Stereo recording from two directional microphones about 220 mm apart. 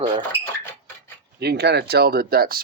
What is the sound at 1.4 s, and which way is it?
Speech, 50° right (ahead or behind).